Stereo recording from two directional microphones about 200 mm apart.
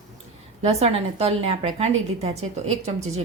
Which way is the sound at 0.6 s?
30° right (ahead or behind).